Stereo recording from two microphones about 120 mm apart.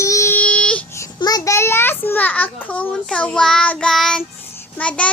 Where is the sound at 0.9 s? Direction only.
30° left (ahead or behind); by 2.5 s 15° left (ahead or behind).